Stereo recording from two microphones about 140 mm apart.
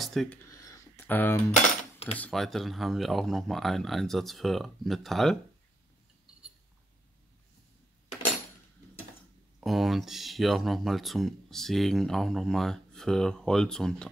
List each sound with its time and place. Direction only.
0.0 s speech: centre (ahead or behind)
0.5 s a sound: 25° left (ahead or behind)
2.1 s speech: 5° left (ahead or behind)
9.6 s speech: centre (ahead or behind)